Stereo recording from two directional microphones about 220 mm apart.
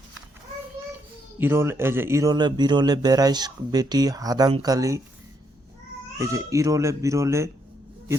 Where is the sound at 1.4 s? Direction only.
10° right (ahead or behind).